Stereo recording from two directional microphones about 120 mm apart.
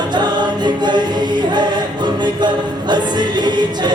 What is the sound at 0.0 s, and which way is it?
Choir, 40° right (ahead or behind).